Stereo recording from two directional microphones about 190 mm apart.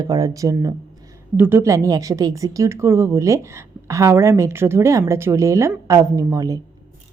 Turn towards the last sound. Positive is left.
turn(degrees=-20)  # may be behind; listen again after turning